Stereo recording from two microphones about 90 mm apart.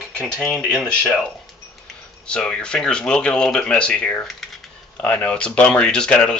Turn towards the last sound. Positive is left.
turn(degrees=10)  # may be behind; listen again after turning